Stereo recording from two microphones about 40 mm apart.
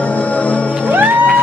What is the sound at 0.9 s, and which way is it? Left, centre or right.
Music, right.